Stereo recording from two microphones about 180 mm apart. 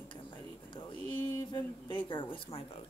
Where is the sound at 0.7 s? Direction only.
25° left (ahead or behind).